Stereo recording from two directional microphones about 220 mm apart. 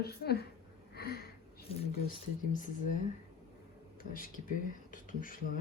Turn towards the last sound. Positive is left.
turn(degrees=40)  # may be behind; listen again after turning